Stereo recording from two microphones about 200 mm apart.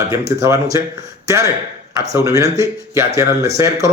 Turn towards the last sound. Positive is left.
turn(degrees=-15)  # may be behind; listen again after turning